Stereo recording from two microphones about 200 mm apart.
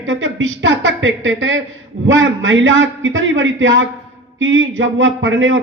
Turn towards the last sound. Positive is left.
turn(degrees=-70)  # may be behind; listen again after turning